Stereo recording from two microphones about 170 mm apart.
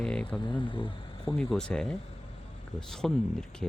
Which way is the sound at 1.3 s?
5° left (ahead or behind).